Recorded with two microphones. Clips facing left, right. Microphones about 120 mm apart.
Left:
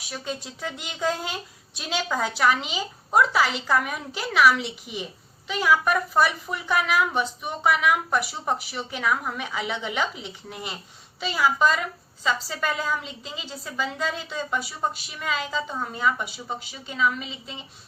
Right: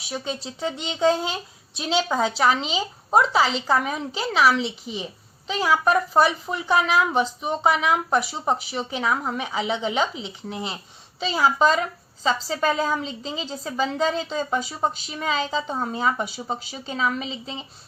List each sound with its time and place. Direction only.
0.4 s a woman's voice: 25° right (ahead or behind)